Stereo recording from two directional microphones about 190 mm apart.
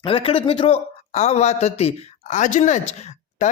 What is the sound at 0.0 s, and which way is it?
Speech, 25° left (ahead or behind).